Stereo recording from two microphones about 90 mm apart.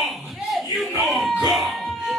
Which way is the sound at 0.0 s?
Centre (ahead or behind).